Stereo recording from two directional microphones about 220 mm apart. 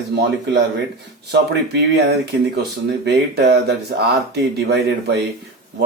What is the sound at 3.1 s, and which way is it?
Speech, 50° right (ahead or behind).